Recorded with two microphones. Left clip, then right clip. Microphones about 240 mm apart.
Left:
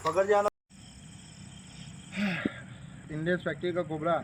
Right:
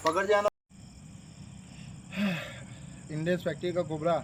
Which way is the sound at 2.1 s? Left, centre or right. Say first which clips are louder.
Even; right.